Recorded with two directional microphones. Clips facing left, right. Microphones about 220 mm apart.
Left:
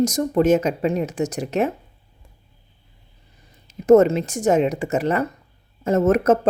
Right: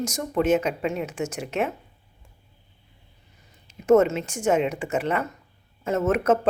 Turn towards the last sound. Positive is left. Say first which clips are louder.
# left 5 dB
turn(degrees=40)  # may be behind; listen again after turning